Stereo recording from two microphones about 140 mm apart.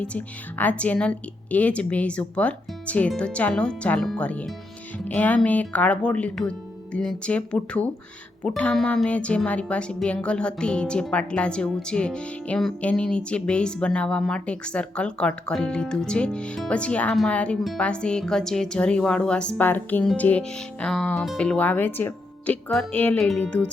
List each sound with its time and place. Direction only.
0.0 s speech: 10° left (ahead or behind)